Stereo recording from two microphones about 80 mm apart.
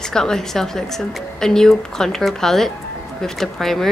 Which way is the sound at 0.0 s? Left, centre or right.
Centre.